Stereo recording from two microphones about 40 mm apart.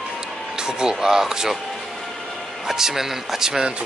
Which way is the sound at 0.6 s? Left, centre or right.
Centre.